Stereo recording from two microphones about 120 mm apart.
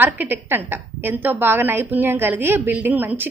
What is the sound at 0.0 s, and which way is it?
A woman's voice, 15° right (ahead or behind).